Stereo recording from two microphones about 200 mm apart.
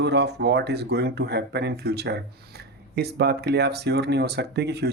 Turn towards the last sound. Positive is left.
turn(degrees=-55)  # may be behind; listen again after turning